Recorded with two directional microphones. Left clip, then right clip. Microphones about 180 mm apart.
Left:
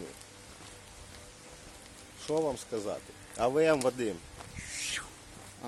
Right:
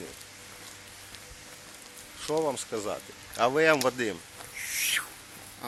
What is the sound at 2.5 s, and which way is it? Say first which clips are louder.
Speech: right 3 dB; 15° right (ahead or behind).